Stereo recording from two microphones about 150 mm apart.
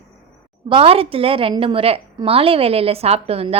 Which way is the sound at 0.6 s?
35° right (ahead or behind).